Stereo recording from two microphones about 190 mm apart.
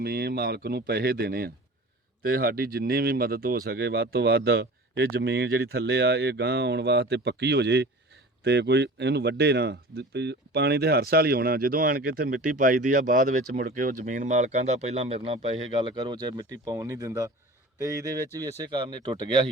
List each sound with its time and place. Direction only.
0.0 s speech: 55° right (ahead or behind); by 19.5 s 20° right (ahead or behind)